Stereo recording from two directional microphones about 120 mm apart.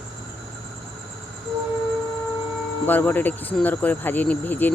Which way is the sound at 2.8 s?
15° left (ahead or behind).